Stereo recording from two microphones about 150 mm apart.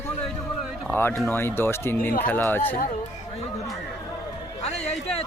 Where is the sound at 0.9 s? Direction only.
15° left (ahead or behind).